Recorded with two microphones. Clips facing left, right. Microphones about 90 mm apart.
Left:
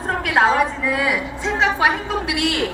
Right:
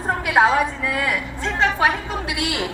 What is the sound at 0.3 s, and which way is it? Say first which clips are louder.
A woman's voice: even; centre (ahead or behind).